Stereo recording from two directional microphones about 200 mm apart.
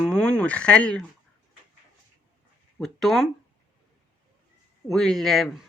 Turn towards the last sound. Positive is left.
turn(degrees=0)  # may be behind; listen again after turning